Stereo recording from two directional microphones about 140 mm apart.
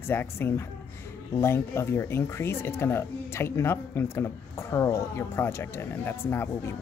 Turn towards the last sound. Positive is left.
turn(degrees=15)  # may be behind; listen again after turning